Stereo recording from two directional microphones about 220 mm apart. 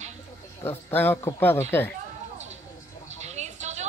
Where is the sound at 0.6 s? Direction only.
10° left (ahead or behind).